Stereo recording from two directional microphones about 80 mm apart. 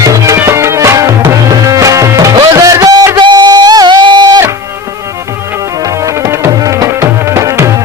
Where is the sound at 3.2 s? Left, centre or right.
Right.